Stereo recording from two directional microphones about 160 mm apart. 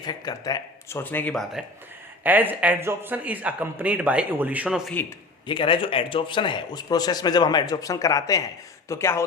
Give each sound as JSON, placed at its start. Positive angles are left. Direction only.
{"t": 0.0, "sound": "speech", "side_deg": 25}
{"t": 2.2, "sound": "speech", "side_deg": -10}
{"t": 5.0, "sound": "speech", "side_deg": 10}
{"t": 5.5, "sound": "speech", "side_deg": 30}